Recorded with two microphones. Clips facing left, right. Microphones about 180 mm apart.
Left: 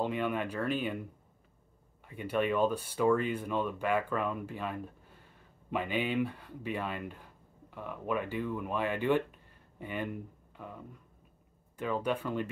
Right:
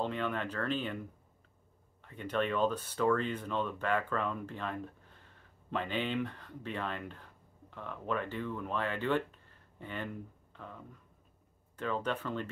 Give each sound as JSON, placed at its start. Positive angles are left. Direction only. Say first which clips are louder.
{"t": 0.0, "sound": "speech", "louder": "left 3 dB", "side_deg": 10}
{"t": 2.0, "sound": "speech", "louder": "left 2 dB", "side_deg": 10}